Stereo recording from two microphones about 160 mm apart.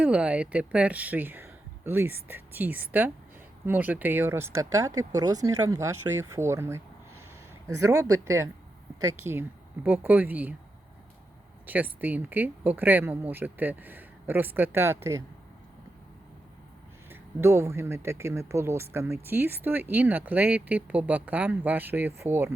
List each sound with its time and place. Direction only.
0.0 s speech: 10° right (ahead or behind)
11.6 s speech: 10° right (ahead or behind)
17.1 s speech: 15° right (ahead or behind)